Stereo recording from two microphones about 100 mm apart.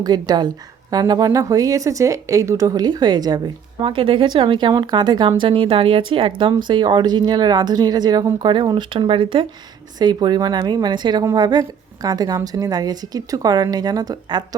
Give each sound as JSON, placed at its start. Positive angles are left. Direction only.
{"t": 0.0, "sound": "a woman's voice", "side_deg": -45}
{"t": 3.8, "sound": "speech", "side_deg": -60}
{"t": 5.4, "sound": "speech", "side_deg": -60}
{"t": 10.0, "sound": "a woman's voice", "side_deg": -45}